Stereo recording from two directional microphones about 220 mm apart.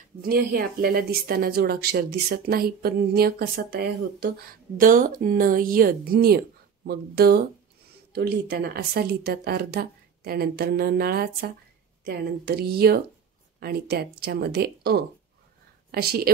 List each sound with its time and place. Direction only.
0.2 s speech: 40° right (ahead or behind)